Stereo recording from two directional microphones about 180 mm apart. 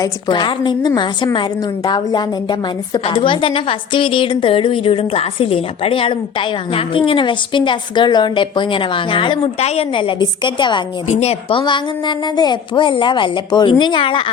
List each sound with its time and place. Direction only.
0.0 s a woman's voice: 25° left (ahead or behind)
11.1 s a woman's voice: 35° left (ahead or behind)